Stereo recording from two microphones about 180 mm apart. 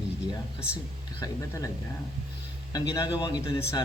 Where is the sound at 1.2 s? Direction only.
20° left (ahead or behind).